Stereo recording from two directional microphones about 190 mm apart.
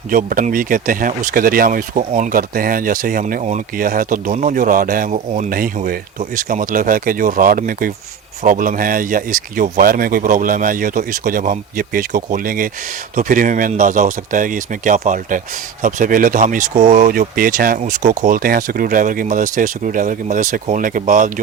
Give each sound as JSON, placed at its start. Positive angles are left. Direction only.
{"t": 0.1, "sound": "speech", "side_deg": -45}
{"t": 5.1, "sound": "speech", "side_deg": -35}
{"t": 5.5, "sound": "speech", "side_deg": -50}